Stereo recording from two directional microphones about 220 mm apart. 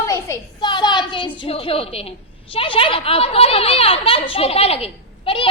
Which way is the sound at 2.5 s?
25° left (ahead or behind).